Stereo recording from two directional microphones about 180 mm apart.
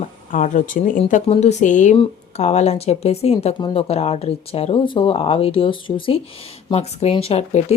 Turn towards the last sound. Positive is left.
turn(degrees=35)  # may be behind; listen again after turning